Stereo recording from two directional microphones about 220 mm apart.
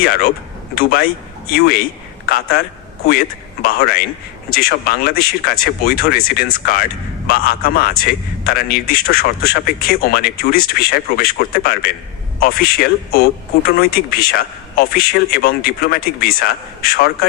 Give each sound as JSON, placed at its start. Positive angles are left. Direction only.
{"t": 0.0, "sound": "a man's voice", "side_deg": 40}
{"t": 2.3, "sound": "a man's voice", "side_deg": 45}